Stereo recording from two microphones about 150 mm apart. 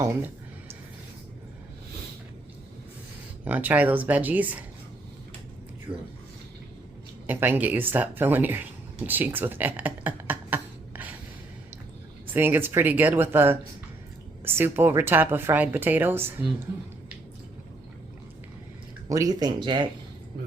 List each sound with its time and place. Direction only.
3.4 s a woman's voice: 10° right (ahead or behind)
7.3 s a woman's voice: 15° right (ahead or behind)
12.3 s a woman's voice: 15° right (ahead or behind)
19.0 s speech: 25° right (ahead or behind)